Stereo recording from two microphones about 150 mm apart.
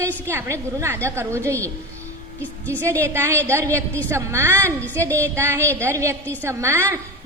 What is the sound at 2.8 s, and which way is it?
A woman's voice, 20° right (ahead or behind).